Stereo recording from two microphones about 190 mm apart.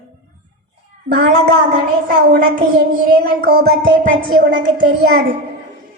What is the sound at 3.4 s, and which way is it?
Speech, 55° right (ahead or behind).